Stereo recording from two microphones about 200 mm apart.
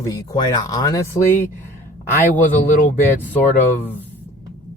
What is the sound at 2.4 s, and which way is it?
Speech, 40° left (ahead or behind).